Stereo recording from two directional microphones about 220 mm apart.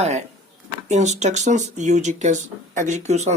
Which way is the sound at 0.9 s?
30° right (ahead or behind).